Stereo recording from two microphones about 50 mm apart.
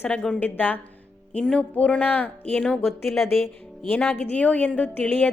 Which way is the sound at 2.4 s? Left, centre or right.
Centre.